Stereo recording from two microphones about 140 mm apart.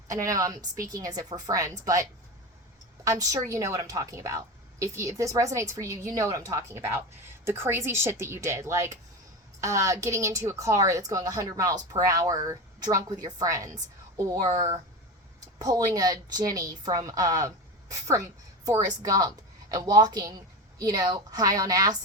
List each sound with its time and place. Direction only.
0.1 s a woman's voice: 25° right (ahead or behind)
15.5 s a woman's voice: 25° right (ahead or behind)
18.6 s a woman's voice: 25° right (ahead or behind)